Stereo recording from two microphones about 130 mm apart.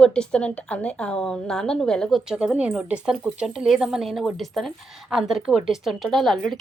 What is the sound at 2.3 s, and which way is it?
A woman's voice, 10° right (ahead or behind).